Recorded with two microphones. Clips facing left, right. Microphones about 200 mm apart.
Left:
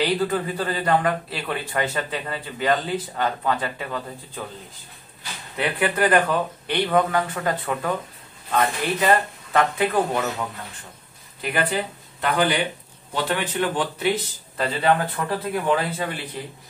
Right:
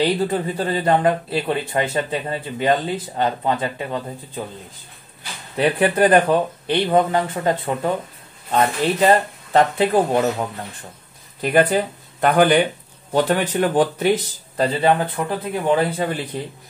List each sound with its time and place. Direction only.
0.0 s speech: 25° right (ahead or behind)
5.6 s speech: 35° right (ahead or behind)
11.4 s speech: 45° right (ahead or behind)
14.6 s speech: 25° right (ahead or behind)